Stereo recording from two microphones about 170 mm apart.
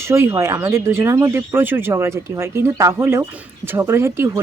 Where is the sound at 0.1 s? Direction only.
15° right (ahead or behind).